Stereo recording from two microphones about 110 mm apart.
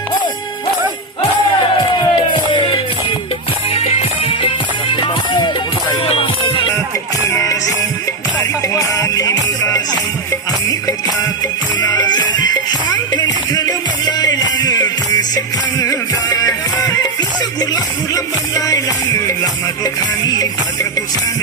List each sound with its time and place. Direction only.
2.0 s music: 45° left (ahead or behind)
3.7 s music: 65° left (ahead or behind)
6.1 s music: 55° left (ahead or behind)
7.3 s music: 25° left (ahead or behind)
11.8 s music: 35° left (ahead or behind)